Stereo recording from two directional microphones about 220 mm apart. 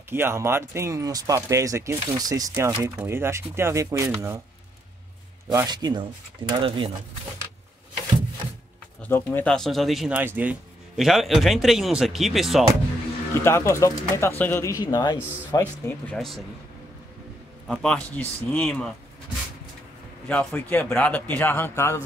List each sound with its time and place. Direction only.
0.1 s speech: 10° right (ahead or behind)
5.5 s speech: 15° right (ahead or behind)
9.0 s speech: 10° left (ahead or behind)
13.3 s speech: 10° left (ahead or behind)
17.6 s speech: 5° left (ahead or behind)
20.2 s speech: 5° left (ahead or behind)